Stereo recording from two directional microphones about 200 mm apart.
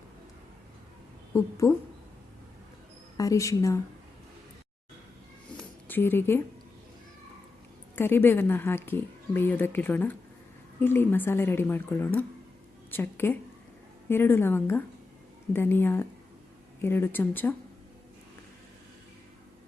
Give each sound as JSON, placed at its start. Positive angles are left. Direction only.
{"t": 1.3, "sound": "a woman's voice", "side_deg": 15}
{"t": 3.2, "sound": "a woman's voice", "side_deg": 15}
{"t": 5.5, "sound": "a sound", "side_deg": 10}
{"t": 7.9, "sound": "a woman's voice", "side_deg": 10}